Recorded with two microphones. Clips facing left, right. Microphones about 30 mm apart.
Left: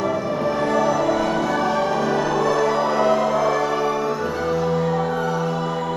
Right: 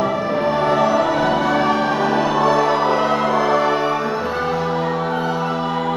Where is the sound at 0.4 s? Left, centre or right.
Right.